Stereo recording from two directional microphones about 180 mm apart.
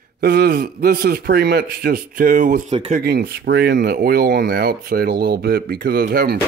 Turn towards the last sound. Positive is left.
turn(degrees=-55)  # may be behind; listen again after turning